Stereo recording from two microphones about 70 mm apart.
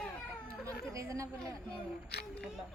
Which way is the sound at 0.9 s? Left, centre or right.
Right.